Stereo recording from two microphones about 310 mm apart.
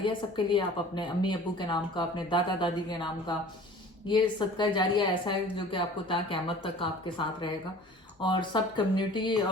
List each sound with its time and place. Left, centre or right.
0.0 s a woman's voice: centre
8.2 s a woman's voice: centre